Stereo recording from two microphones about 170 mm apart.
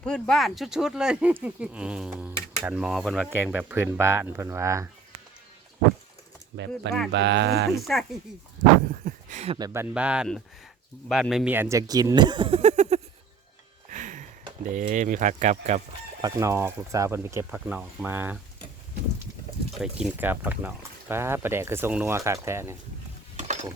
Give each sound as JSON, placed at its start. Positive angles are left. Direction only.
{"t": 0.0, "sound": "speech", "side_deg": 5}
{"t": 7.1, "sound": "speech", "side_deg": -90}
{"t": 7.9, "sound": "speech", "side_deg": 5}
{"t": 8.9, "sound": "a sound", "side_deg": -55}
{"t": 9.6, "sound": "speech", "side_deg": -20}
{"t": 9.9, "sound": "speech", "side_deg": -5}
{"t": 13.9, "sound": "a sound", "side_deg": -50}
{"t": 14.7, "sound": "speech", "side_deg": -50}
{"t": 16.2, "sound": "speech", "side_deg": -15}
{"t": 19.8, "sound": "speech", "side_deg": -10}
{"t": 23.4, "sound": "mechanisms", "side_deg": -45}